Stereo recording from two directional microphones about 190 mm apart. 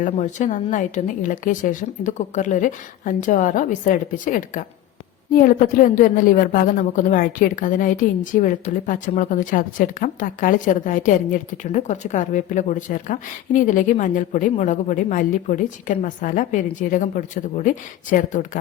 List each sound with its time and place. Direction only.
0.0 s a woman's voice: 40° left (ahead or behind)